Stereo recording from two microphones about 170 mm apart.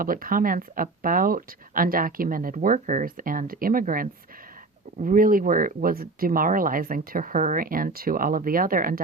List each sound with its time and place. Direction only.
0.0 s speech: 55° right (ahead or behind)